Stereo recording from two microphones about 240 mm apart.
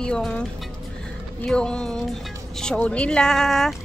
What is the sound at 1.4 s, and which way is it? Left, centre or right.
Speech, centre.